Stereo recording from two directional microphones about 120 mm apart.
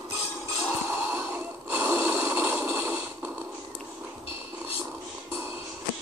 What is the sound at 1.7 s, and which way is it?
Snort, 20° right (ahead or behind).